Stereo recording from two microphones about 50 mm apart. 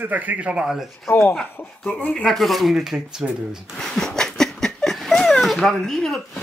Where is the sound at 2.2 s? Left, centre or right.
Centre.